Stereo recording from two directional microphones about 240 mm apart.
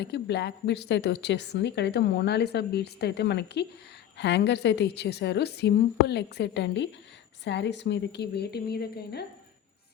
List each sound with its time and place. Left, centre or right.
0.0 s a woman's voice: left